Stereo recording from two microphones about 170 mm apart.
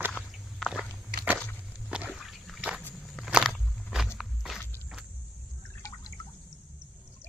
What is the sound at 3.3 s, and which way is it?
Biting, centre (ahead or behind).